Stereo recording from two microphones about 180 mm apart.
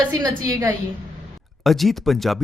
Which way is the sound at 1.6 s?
Centre (ahead or behind).